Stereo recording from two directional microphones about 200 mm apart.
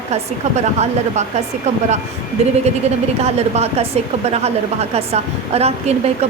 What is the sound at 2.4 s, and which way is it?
A woman's voice, 35° right (ahead or behind).